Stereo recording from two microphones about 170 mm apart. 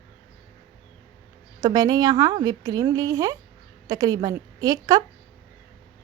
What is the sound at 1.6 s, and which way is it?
A woman's voice, 25° right (ahead or behind).